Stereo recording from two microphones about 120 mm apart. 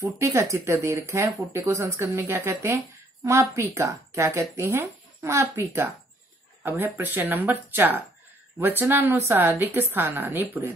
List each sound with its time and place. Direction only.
0.0 s speech: 20° right (ahead or behind)